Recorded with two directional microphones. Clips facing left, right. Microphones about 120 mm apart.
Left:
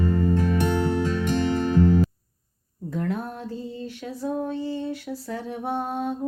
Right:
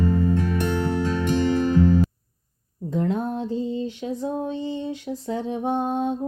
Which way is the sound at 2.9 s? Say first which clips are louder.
Right 4 dB; 20° right (ahead or behind).